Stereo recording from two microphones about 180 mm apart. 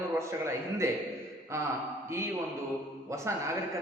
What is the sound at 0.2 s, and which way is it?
Speech, 15° right (ahead or behind).